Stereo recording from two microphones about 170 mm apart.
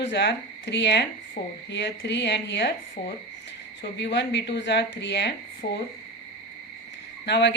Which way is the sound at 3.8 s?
90° left.